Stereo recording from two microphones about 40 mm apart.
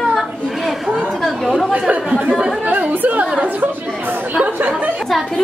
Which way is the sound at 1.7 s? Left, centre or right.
Right.